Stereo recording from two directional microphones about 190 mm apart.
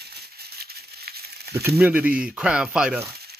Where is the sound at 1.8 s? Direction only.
5° right (ahead or behind).